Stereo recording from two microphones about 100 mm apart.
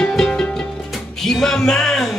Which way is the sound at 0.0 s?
10° left (ahead or behind).